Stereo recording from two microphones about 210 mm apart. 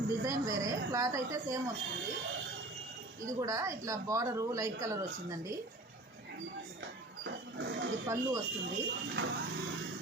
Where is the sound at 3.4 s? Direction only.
15° right (ahead or behind).